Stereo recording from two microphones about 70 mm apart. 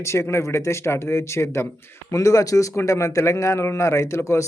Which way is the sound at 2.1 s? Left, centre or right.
Left.